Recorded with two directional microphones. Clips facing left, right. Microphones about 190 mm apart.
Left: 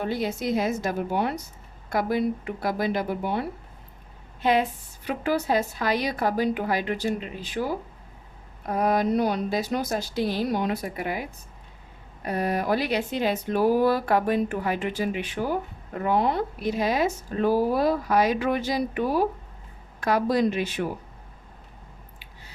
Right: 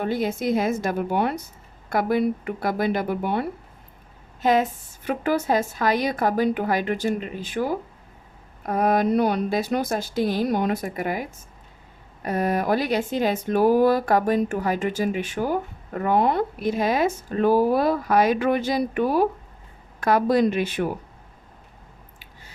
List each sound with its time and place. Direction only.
0.1 s speech: 50° right (ahead or behind)
4.4 s speech: 45° right (ahead or behind)
8.8 s speech: 55° right (ahead or behind)
12.2 s speech: 45° right (ahead or behind)